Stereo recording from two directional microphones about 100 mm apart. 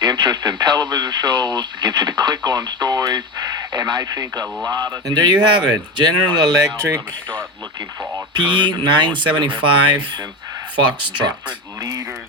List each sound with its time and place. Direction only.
0.0 s speech: 50° right (ahead or behind)
8.3 s speech: 50° right (ahead or behind)